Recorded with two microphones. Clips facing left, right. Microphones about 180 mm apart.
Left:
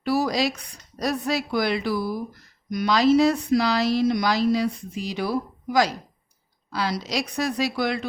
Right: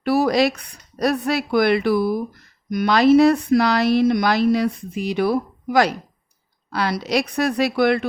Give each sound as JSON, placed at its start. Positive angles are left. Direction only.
{"t": 0.0, "sound": "a woman's voice", "side_deg": -60}